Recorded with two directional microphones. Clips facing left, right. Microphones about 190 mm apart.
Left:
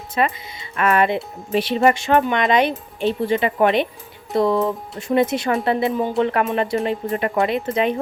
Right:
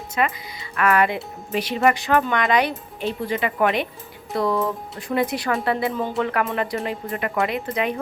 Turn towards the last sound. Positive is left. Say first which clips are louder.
# left 4 dB
turn(degrees=25)  # may be behind; listen again after turning